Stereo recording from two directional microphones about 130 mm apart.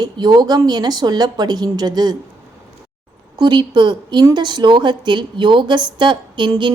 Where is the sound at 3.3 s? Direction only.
35° right (ahead or behind).